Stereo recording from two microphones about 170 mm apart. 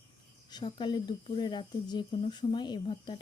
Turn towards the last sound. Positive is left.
turn(degrees=25)  # may be behind; listen again after turning